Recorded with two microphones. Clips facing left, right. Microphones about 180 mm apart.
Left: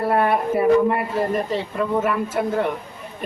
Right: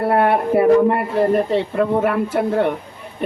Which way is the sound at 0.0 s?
60° right (ahead or behind).